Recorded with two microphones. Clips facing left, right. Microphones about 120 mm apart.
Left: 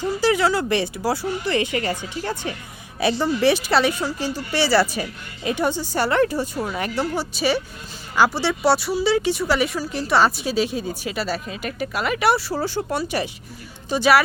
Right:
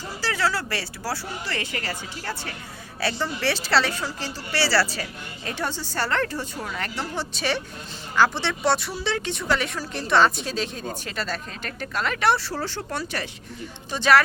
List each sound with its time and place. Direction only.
0.2 s speech: 15° left (ahead or behind)